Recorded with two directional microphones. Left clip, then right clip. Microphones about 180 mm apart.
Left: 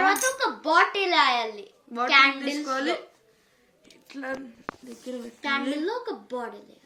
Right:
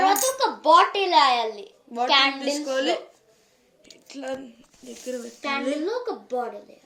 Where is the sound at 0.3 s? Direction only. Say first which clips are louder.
Right 4 dB; 20° left (ahead or behind).